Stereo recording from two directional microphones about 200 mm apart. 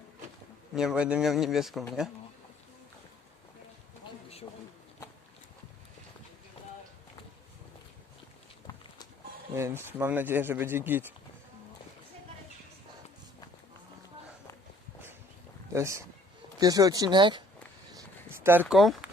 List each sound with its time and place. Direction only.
0.7 s speech: centre (ahead or behind)
9.6 s speech: 15° right (ahead or behind)
15.7 s speech: 15° right (ahead or behind)
17.9 s a sound: 10° right (ahead or behind)
18.7 s speech: centre (ahead or behind)